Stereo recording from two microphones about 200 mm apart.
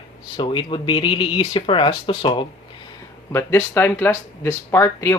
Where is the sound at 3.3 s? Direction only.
10° left (ahead or behind).